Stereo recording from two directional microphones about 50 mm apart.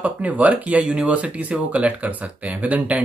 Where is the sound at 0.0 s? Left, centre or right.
Right.